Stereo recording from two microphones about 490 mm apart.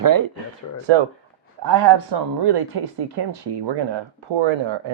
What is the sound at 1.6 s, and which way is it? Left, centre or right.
Speech, right.